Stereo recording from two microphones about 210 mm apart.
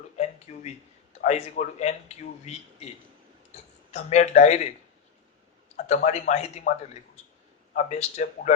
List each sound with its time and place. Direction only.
0.5 s a sound: 30° left (ahead or behind)
1.2 s speech: 35° left (ahead or behind)
5.9 s speech: 30° left (ahead or behind)